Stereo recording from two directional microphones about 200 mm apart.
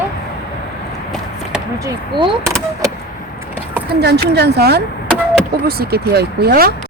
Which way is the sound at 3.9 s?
55° right (ahead or behind).